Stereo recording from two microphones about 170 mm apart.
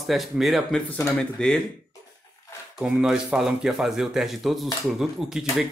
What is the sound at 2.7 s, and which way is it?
Speech, 5° right (ahead or behind).